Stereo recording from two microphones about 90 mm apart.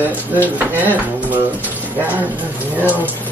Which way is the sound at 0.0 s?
20° right (ahead or behind).